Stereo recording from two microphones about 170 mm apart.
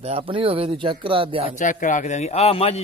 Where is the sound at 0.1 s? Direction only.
30° right (ahead or behind).